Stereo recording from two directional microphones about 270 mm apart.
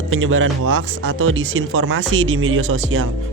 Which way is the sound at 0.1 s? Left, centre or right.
Right.